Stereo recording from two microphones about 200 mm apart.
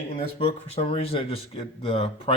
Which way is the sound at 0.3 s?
30° left (ahead or behind).